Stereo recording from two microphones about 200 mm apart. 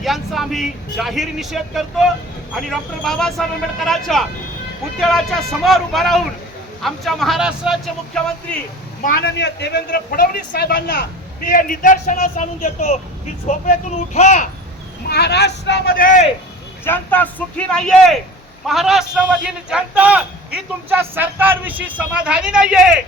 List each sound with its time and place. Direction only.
0.0 s speech: centre (ahead or behind)
9.0 s a man's voice: 55° left (ahead or behind)
11.4 s speech: 45° left (ahead or behind)
15.0 s a man's voice: 55° left (ahead or behind)
16.8 s speech: 10° left (ahead or behind)